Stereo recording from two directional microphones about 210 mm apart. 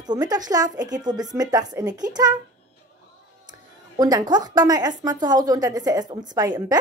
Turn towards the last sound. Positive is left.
turn(degrees=-15)  # may be behind; listen again after turning